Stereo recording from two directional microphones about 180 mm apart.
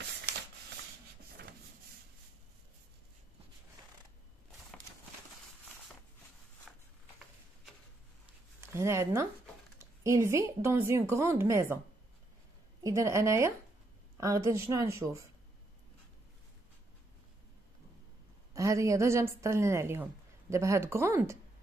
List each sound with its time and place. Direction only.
6.7 s a sound: centre (ahead or behind)
8.5 s a woman's voice: 15° right (ahead or behind)
12.8 s a woman's voice: 15° right (ahead or behind)
18.5 s a woman's voice: 15° right (ahead or behind)